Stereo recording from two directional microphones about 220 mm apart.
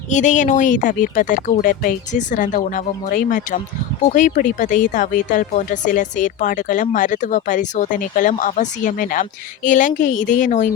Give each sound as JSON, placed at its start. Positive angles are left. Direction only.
{"t": 0.1, "sound": "speech", "side_deg": 35}